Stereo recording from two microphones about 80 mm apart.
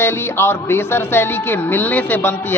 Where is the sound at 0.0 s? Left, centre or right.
Left.